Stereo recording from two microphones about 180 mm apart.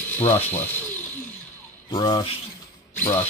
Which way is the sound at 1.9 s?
25° left (ahead or behind).